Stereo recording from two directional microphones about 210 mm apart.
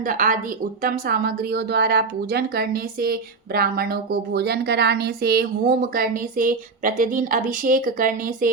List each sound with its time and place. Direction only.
0.0 s a woman's voice: 40° right (ahead or behind)